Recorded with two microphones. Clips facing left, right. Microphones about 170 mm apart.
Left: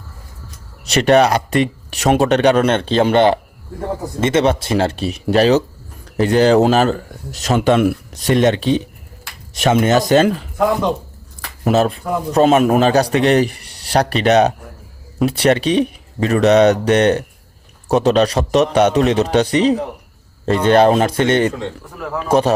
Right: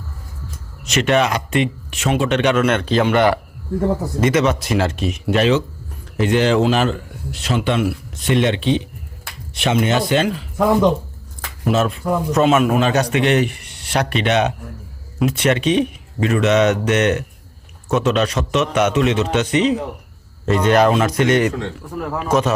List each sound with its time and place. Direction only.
0.9 s a man's voice: 35° left (ahead or behind)
11.6 s a man's voice: 35° left (ahead or behind)